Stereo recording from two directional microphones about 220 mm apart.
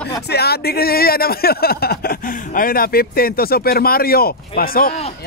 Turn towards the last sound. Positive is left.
turn(degrees=40)  # may be behind; listen again after turning